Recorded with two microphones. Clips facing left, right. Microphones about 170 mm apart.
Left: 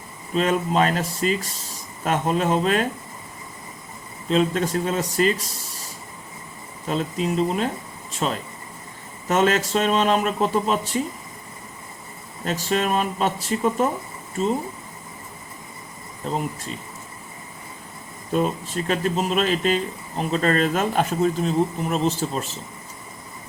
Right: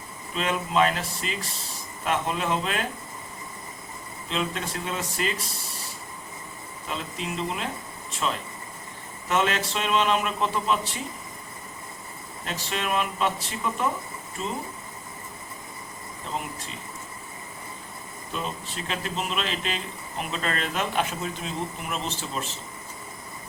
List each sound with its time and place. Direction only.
0.3 s speech: 40° left (ahead or behind)
4.3 s speech: 40° left (ahead or behind)
6.8 s speech: 40° left (ahead or behind)
12.5 s speech: 40° left (ahead or behind)
18.3 s speech: 45° left (ahead or behind)